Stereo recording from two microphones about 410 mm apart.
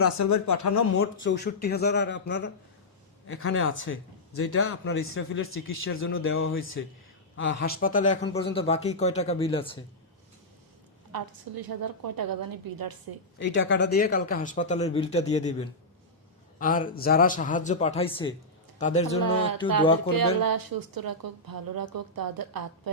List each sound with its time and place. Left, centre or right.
0.0 s speech: left
1.2 s a man's voice: left
11.1 s a woman's voice: right
13.4 s a man's voice: left
19.2 s a woman's voice: right